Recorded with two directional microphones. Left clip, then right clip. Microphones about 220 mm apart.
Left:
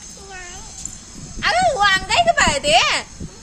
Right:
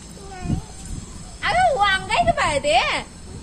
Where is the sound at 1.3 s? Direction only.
35° left (ahead or behind).